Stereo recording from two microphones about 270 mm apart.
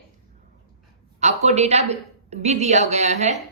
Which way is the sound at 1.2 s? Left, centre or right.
Right.